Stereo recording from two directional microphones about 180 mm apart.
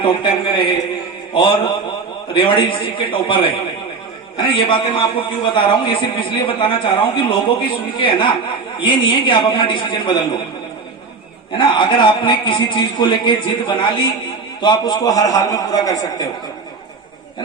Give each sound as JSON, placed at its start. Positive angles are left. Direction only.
{"t": 0.0, "sound": "a man's voice", "side_deg": 25}
{"t": 11.5, "sound": "a man's voice", "side_deg": 25}